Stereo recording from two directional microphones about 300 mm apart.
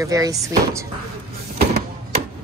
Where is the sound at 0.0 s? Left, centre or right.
Centre.